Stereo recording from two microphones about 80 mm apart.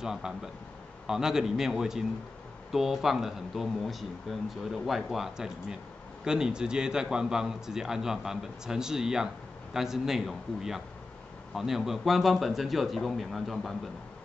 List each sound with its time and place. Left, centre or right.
0.0 s a man's voice: centre